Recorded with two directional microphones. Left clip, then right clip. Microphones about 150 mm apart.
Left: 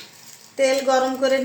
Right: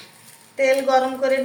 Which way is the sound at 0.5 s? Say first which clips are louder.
Right 1 dB; 90° left.